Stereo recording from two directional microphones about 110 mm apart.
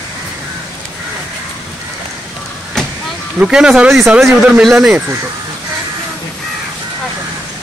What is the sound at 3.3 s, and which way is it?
Speech, 5° right (ahead or behind).